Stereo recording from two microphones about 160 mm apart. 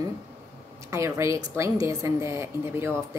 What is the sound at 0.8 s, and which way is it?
A woman's voice, 15° right (ahead or behind).